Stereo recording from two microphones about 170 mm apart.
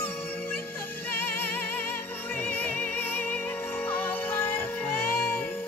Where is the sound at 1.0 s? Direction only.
10° left (ahead or behind).